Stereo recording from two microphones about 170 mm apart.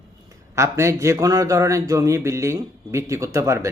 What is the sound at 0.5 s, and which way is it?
A man's voice, 15° right (ahead or behind).